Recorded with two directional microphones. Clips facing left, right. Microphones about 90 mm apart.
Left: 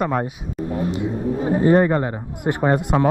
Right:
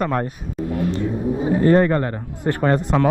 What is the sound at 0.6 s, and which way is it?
Vehicle, 30° left (ahead or behind).